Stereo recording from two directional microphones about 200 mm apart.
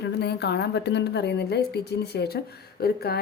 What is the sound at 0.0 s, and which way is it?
A woman's voice, 55° left (ahead or behind).